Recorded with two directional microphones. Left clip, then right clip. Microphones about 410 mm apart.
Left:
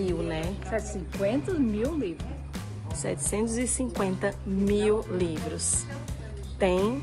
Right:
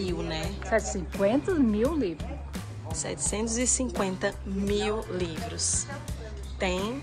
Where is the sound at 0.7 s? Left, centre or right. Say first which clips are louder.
Right 7 dB; centre.